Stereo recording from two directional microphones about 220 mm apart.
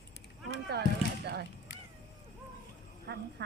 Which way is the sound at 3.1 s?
50° right (ahead or behind).